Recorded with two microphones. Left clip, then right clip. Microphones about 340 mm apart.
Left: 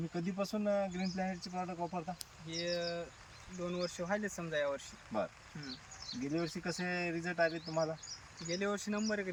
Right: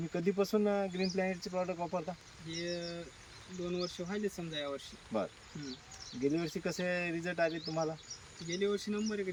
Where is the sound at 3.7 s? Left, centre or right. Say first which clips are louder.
Left 3 dB; centre.